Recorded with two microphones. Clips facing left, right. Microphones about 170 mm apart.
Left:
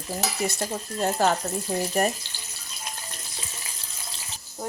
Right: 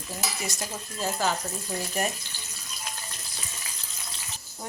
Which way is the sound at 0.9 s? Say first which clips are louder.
Left 5 dB; 60° left (ahead or behind).